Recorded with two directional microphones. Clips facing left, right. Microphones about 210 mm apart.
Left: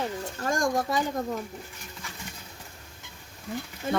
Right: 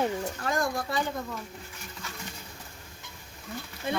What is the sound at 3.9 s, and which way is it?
Speech, 45° left (ahead or behind).